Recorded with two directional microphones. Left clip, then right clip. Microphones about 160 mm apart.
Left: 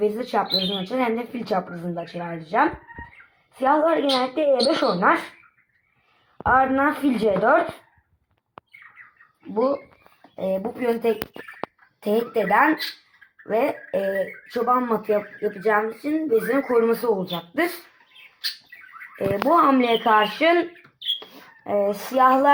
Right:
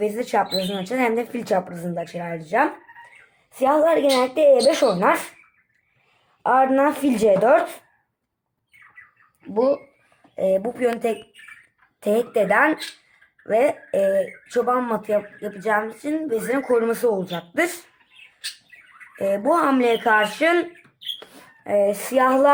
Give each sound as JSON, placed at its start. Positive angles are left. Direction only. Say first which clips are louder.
{"t": 0.0, "sound": "a woman's voice", "louder": "right 1 dB", "side_deg": -25}
{"t": 2.0, "sound": "a woman's voice", "louder": "right 4 dB", "side_deg": -30}
{"t": 6.4, "sound": "a woman's voice", "louder": "right 1 dB", "side_deg": -40}
{"t": 10.3, "sound": "speech", "louder": "right 5 dB", "side_deg": -25}
{"t": 16.1, "sound": "speech", "louder": "left 2 dB", "side_deg": -15}
{"t": 19.1, "sound": "speech", "louder": "left 1 dB", "side_deg": -5}
{"t": 21.2, "sound": "a sound", "louder": "left 2 dB", "side_deg": -5}
{"t": 22.0, "sound": "speech", "louder": "left 1 dB", "side_deg": -25}